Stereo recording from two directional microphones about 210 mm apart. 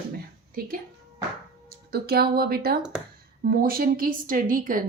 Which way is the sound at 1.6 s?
45° right (ahead or behind).